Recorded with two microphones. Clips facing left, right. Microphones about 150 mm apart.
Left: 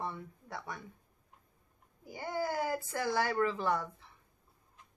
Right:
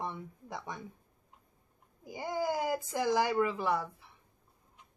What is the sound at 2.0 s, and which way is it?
Speech, 15° right (ahead or behind).